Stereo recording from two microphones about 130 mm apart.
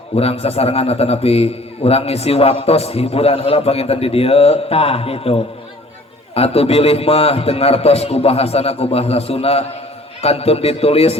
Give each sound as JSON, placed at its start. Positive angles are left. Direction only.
{"t": 0.2, "sound": "a man's voice", "side_deg": 50}